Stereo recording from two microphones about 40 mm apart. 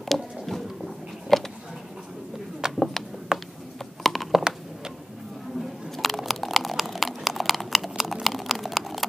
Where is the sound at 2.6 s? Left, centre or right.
Centre.